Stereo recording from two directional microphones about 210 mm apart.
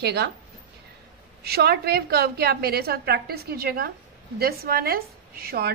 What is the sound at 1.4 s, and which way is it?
Speech, 50° right (ahead or behind).